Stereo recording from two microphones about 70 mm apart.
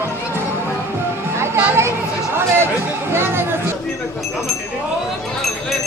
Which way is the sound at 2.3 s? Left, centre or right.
Right.